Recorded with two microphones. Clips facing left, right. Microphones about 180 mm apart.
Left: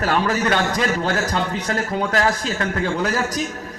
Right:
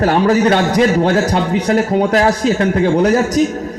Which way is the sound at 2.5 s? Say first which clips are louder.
Right 10 dB; 20° right (ahead or behind).